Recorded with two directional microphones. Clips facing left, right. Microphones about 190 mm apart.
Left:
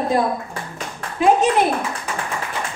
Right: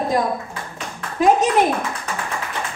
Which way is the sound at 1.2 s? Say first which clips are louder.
Even; 40° right (ahead or behind).